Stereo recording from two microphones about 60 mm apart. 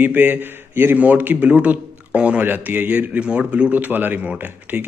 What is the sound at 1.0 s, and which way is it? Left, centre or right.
A man's voice, right.